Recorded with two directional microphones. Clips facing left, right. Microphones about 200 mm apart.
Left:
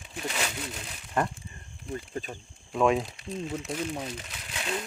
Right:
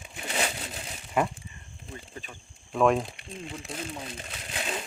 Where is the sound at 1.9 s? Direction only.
40° left (ahead or behind).